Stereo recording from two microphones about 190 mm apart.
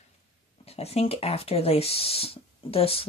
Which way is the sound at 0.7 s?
35° left (ahead or behind).